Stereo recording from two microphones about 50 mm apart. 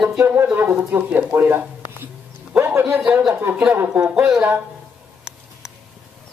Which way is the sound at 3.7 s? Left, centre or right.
Right.